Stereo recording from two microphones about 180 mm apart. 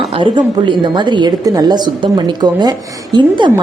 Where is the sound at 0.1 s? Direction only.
25° right (ahead or behind).